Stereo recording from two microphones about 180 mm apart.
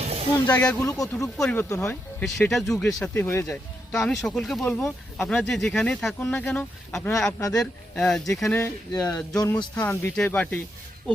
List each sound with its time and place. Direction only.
0.0 s music: 35° right (ahead or behind)
0.4 s speech: 10° left (ahead or behind)
0.9 s speech: 20° left (ahead or behind)
2.2 s speech: centre (ahead or behind)
3.9 s speech: centre (ahead or behind)
8.6 s speech: 20° left (ahead or behind)